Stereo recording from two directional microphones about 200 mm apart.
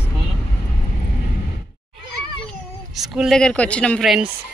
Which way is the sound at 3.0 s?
Centre (ahead or behind).